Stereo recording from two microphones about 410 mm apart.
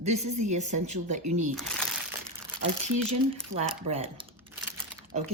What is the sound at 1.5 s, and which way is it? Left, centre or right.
Speech, centre.